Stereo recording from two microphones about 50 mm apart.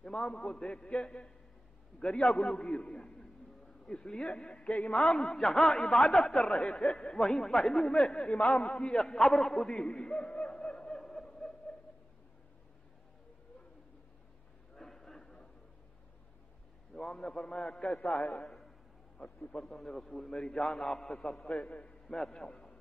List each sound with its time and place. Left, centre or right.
0.0 s a man's voice: centre
8.3 s a man's voice: left
8.7 s a sound: centre
14.8 s a sound: centre
16.9 s a man's voice: centre
19.2 s a man's voice: left
19.5 s a man's voice: centre
22.0 s a man's voice: centre